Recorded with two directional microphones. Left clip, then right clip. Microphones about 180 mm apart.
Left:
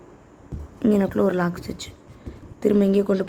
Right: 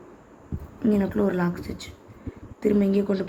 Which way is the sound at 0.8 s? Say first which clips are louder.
Left 4 dB; 40° left (ahead or behind).